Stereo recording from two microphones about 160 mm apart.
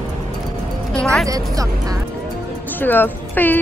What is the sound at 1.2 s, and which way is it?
Speech, 20° right (ahead or behind).